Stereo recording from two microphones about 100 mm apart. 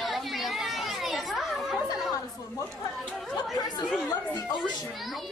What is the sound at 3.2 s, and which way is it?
Speech, centre (ahead or behind).